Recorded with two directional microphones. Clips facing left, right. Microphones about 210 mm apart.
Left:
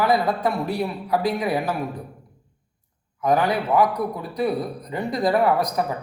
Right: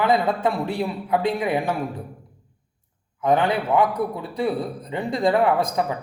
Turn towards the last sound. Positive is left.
turn(degrees=-25)  # may be behind; listen again after turning